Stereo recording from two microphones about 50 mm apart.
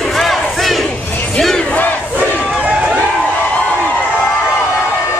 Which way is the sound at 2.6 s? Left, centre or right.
Right.